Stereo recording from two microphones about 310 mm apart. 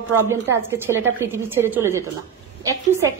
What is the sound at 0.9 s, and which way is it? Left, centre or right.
A woman's voice, centre.